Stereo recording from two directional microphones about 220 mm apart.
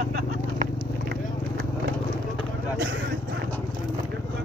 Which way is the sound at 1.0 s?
50° right (ahead or behind).